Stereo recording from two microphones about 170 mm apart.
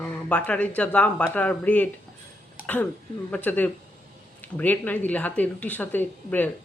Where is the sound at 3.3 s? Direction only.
10° left (ahead or behind).